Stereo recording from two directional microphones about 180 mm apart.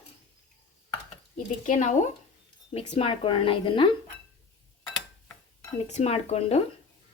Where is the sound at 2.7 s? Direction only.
30° left (ahead or behind).